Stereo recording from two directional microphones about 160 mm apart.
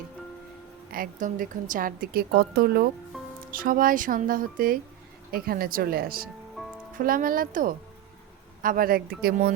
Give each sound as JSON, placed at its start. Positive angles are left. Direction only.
{"t": 0.9, "sound": "a woman's voice", "side_deg": -65}
{"t": 6.6, "sound": "music", "side_deg": 0}
{"t": 6.9, "sound": "a woman's voice", "side_deg": -60}